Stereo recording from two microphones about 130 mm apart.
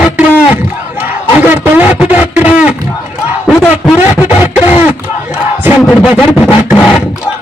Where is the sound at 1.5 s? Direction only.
15° right (ahead or behind).